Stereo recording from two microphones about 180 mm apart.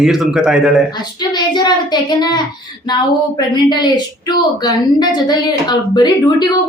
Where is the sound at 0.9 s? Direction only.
25° left (ahead or behind).